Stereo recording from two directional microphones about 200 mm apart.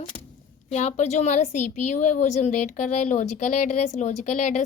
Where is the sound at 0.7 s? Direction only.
35° left (ahead or behind).